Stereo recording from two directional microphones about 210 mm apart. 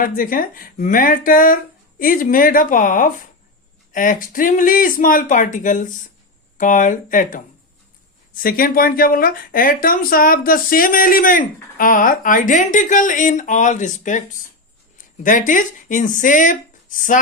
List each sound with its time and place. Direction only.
0.0 s speech: 40° left (ahead or behind)